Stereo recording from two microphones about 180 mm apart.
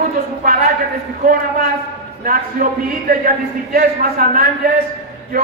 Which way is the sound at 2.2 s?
50° right (ahead or behind).